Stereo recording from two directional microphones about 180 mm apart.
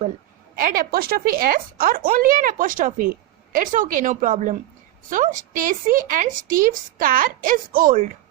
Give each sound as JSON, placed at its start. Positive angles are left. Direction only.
{"t": 0.5, "sound": "a woman's voice", "side_deg": -50}